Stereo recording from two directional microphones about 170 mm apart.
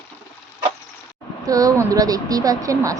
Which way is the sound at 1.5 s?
20° right (ahead or behind).